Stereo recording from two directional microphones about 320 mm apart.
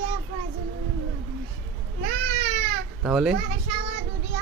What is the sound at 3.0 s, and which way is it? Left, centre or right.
Speech, centre.